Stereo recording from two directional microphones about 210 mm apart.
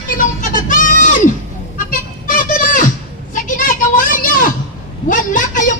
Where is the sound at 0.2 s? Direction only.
40° left (ahead or behind).